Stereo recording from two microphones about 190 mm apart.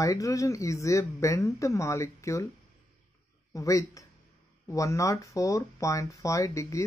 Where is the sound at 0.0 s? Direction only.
15° left (ahead or behind).